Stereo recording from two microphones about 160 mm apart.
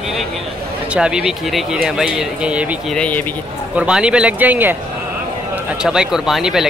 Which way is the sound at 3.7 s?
5° right (ahead or behind).